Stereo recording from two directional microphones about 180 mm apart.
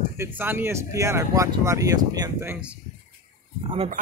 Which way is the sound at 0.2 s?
10° right (ahead or behind).